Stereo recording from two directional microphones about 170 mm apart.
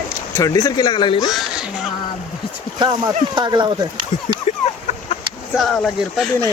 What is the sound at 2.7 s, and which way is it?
Speech, 25° right (ahead or behind).